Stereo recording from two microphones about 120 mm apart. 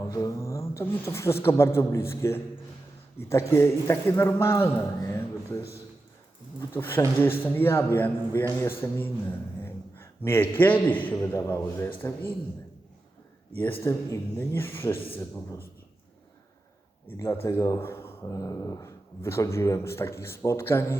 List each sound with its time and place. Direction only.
0.1 s a man's voice: 25° left (ahead or behind)
13.8 s a man's voice: 20° left (ahead or behind)
17.1 s speech: 20° left (ahead or behind)